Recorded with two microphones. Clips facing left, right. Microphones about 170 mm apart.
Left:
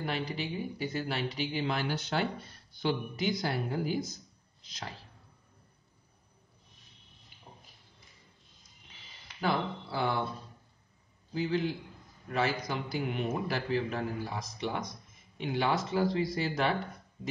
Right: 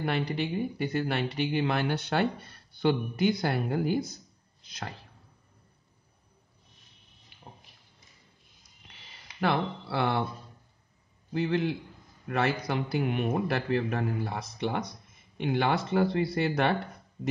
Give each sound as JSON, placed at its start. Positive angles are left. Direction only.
{"t": 0.0, "sound": "a man's voice", "side_deg": -60}
{"t": 8.9, "sound": "a sound", "side_deg": -65}
{"t": 9.4, "sound": "speech", "side_deg": -70}
{"t": 11.3, "sound": "a man's voice", "side_deg": -65}